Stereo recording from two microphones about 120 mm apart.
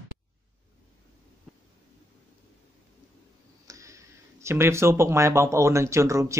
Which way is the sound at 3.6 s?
25° right (ahead or behind).